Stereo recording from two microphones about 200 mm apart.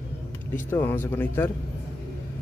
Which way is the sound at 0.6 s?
10° left (ahead or behind).